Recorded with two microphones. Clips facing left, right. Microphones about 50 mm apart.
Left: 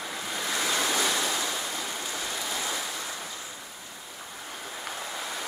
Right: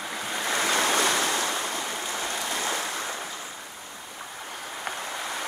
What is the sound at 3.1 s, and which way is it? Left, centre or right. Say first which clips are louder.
Waves: right 4 dB; centre.